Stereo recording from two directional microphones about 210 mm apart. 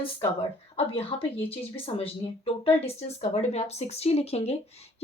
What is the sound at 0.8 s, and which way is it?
Speech, 30° left (ahead or behind).